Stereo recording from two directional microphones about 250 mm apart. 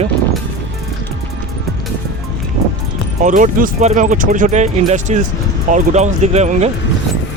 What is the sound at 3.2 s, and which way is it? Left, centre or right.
Speech, right.